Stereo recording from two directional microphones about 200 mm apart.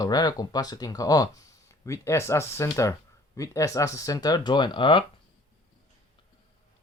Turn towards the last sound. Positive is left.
turn(degrees=25)  # may be behind; listen again after turning